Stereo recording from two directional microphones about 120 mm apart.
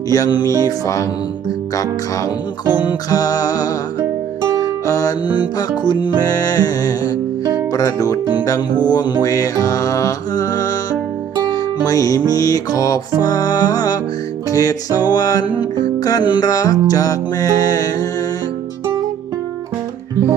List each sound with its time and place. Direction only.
0.1 s music: 35° left (ahead or behind)
4.9 s music: 30° left (ahead or behind)
11.9 s music: 30° left (ahead or behind)